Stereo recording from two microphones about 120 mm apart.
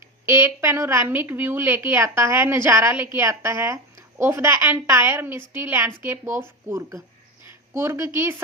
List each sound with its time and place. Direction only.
0.3 s a woman's voice: 20° right (ahead or behind)